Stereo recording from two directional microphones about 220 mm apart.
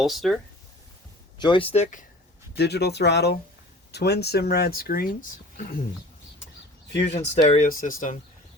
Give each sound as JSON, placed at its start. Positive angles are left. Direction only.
{"t": 0.0, "sound": "speech", "side_deg": 0}
{"t": 1.4, "sound": "speech", "side_deg": 20}
{"t": 2.6, "sound": "speech", "side_deg": 50}
{"t": 7.1, "sound": "speech", "side_deg": 30}